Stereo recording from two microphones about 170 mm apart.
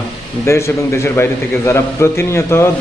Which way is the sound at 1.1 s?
15° left (ahead or behind).